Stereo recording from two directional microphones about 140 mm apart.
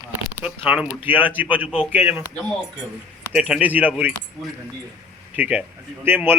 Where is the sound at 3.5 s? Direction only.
10° right (ahead or behind).